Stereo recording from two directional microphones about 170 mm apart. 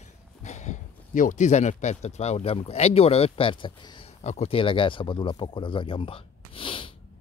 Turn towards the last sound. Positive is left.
turn(degrees=30)  # may be behind; listen again after turning